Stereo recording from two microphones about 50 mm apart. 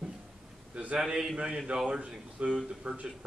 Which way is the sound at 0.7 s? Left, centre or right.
Right.